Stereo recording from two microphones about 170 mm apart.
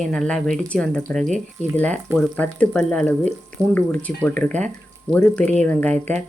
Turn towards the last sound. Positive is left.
turn(degrees=10)  # may be behind; listen again after turning